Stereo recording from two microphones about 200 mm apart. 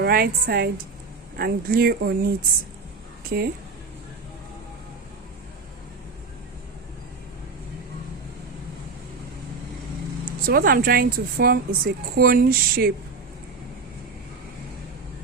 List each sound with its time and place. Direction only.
0.0 s a woman's voice: 50° right (ahead or behind)
3.2 s speech: 50° right (ahead or behind)
10.4 s a woman's voice: 45° right (ahead or behind)